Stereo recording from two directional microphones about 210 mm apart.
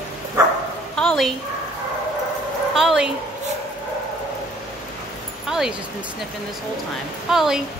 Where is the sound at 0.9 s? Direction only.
Centre (ahead or behind).